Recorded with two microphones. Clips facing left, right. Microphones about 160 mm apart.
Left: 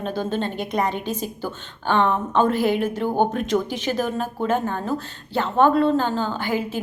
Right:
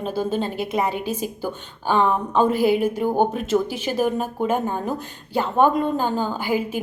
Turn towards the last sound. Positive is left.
turn(degrees=-10)  # may be behind; listen again after turning